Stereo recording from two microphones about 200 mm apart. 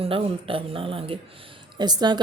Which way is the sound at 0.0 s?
25° right (ahead or behind).